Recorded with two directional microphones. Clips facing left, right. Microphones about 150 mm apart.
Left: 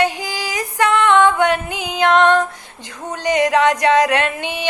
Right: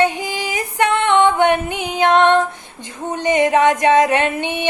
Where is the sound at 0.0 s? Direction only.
20° right (ahead or behind).